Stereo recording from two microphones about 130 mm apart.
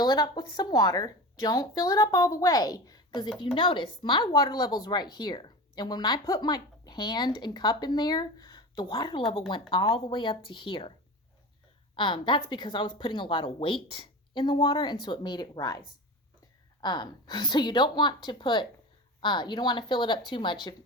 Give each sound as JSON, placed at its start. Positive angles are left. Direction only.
{"t": 0.0, "sound": "a woman's voice", "side_deg": 35}
{"t": 3.4, "sound": "a woman's voice", "side_deg": 40}
{"t": 11.9, "sound": "a woman's voice", "side_deg": 35}
{"t": 16.8, "sound": "a woman's voice", "side_deg": 35}